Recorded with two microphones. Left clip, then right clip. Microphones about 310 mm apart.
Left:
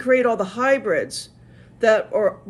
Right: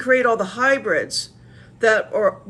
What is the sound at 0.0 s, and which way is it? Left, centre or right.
Speech, centre.